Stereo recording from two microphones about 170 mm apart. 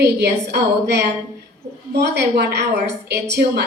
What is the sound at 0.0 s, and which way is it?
A woman's voice, 75° right (ahead or behind).